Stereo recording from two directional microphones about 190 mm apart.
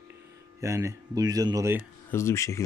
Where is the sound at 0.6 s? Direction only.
15° right (ahead or behind).